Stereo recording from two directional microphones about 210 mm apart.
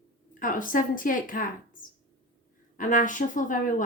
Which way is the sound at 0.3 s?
40° left (ahead or behind).